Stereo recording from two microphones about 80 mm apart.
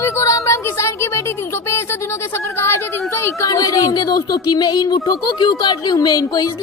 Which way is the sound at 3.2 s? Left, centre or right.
Left.